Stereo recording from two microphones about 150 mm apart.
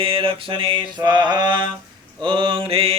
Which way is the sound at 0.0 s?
40° right (ahead or behind).